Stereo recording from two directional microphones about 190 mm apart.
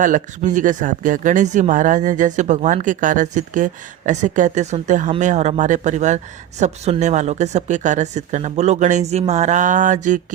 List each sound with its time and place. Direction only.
0.0 s speech: 45° right (ahead or behind)